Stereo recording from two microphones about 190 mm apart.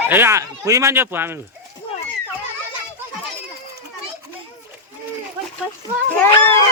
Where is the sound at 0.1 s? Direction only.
15° right (ahead or behind).